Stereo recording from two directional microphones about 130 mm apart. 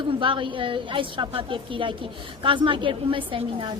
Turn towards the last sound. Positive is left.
turn(degrees=-40)  # may be behind; listen again after turning